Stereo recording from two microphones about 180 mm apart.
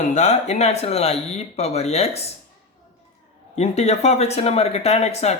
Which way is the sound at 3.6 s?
35° left (ahead or behind).